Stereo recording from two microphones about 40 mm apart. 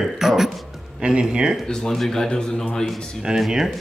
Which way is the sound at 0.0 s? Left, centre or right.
Centre.